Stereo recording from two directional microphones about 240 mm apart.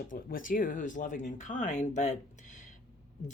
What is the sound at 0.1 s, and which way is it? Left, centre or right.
A woman's voice, left.